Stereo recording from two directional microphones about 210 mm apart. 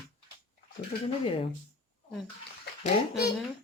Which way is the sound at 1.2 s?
25° left (ahead or behind).